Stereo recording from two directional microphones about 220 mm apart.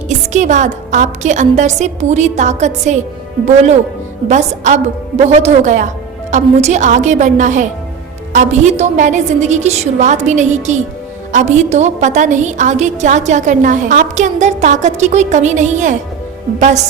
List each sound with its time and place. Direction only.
0.1 s a woman's voice: 35° right (ahead or behind)